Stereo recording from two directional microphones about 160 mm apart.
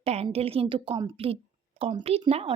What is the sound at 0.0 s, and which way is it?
A woman's voice, 40° right (ahead or behind).